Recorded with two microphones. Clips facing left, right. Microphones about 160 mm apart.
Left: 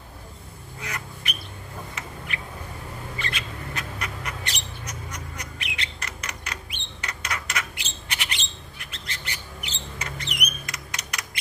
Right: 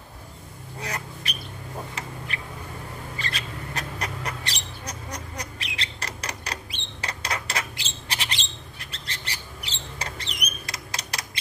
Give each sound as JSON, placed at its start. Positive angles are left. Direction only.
{"t": 0.7, "sound": "duck", "side_deg": -35}
{"t": 2.0, "sound": "a sound", "side_deg": -35}
{"t": 3.2, "sound": "mouse", "side_deg": -35}